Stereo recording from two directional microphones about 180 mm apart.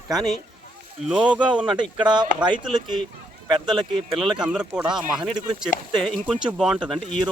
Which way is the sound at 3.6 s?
Centre (ahead or behind).